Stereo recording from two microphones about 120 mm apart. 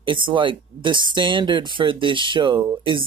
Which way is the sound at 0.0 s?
45° right (ahead or behind).